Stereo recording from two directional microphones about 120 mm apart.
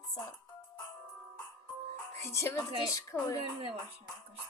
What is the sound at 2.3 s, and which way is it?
Speech, 25° left (ahead or behind).